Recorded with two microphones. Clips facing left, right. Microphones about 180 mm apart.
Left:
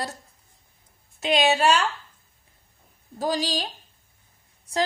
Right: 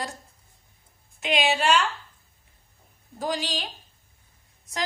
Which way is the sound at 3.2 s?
35° left (ahead or behind).